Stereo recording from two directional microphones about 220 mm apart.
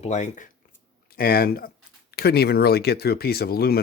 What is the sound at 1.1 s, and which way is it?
Speech, 45° left (ahead or behind).